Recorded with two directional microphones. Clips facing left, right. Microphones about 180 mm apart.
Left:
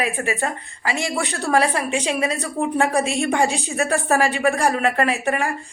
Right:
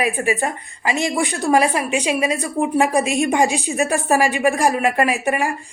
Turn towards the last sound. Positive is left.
turn(degrees=-15)  # may be behind; listen again after turning